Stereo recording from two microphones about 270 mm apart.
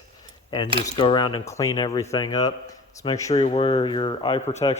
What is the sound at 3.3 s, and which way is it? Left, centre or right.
Speech, left.